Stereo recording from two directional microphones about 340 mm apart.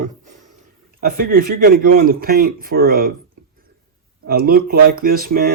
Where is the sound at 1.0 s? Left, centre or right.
Right.